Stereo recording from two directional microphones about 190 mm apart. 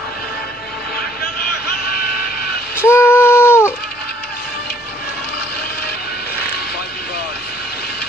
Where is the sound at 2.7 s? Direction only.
10° left (ahead or behind).